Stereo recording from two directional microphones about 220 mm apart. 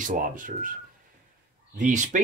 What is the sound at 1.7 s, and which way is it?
Speech, 35° right (ahead or behind).